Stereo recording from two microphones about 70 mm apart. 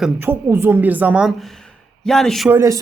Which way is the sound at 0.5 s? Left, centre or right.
Right.